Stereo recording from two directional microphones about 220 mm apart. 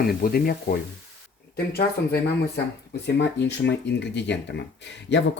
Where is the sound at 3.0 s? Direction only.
50° left (ahead or behind).